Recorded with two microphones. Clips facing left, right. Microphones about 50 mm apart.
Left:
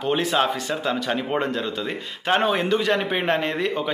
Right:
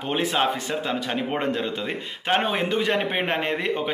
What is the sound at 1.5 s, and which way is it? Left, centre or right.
A man's voice, right.